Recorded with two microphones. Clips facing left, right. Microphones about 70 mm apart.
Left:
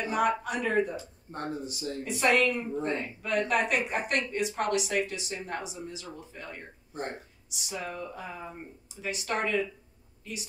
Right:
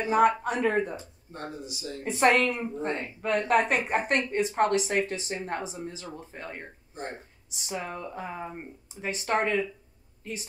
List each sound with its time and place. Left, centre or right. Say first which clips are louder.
0.0 s a woman's voice: right 5 dB; right
1.3 s speech: left 3 dB; left
2.0 s a woman's voice: right 3 dB; right